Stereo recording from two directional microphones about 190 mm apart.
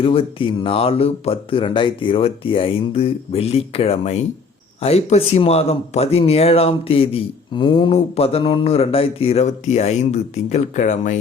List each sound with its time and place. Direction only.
0.0 s speech: 30° left (ahead or behind)